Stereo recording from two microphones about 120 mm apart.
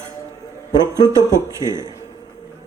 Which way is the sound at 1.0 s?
25° right (ahead or behind).